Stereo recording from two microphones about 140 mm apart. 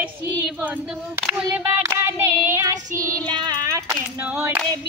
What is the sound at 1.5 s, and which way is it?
Child singing, 15° right (ahead or behind).